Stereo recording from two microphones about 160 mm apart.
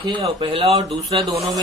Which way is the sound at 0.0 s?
30° right (ahead or behind).